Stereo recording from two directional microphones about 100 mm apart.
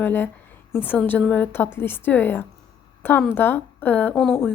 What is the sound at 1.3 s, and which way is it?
A woman's voice, 20° left (ahead or behind).